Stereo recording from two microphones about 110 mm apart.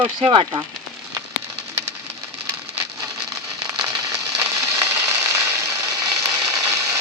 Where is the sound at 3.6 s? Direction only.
40° right (ahead or behind).